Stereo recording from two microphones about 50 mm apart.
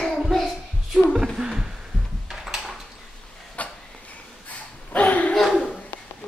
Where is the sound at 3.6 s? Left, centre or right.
Left.